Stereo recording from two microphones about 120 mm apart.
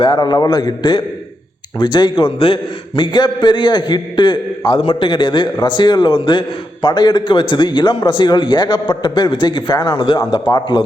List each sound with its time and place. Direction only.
0.0 s a man's voice: 35° left (ahead or behind)